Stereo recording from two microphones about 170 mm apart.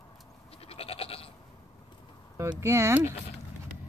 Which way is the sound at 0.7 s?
35° left (ahead or behind).